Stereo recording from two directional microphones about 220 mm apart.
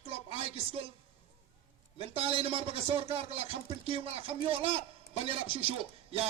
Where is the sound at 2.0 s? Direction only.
25° right (ahead or behind).